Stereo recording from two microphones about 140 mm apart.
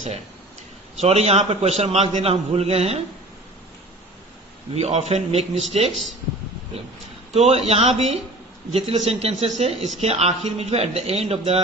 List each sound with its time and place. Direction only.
0.9 s a man's voice: 50° right (ahead or behind)
4.7 s a man's voice: 50° right (ahead or behind)
7.3 s a man's voice: 45° right (ahead or behind)